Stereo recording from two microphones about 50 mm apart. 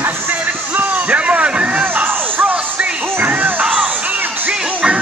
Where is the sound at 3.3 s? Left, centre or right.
Right.